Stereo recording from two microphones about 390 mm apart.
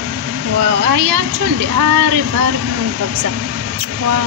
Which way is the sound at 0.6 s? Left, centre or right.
Right.